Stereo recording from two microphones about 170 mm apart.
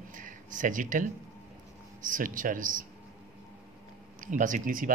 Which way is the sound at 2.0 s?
50° right (ahead or behind).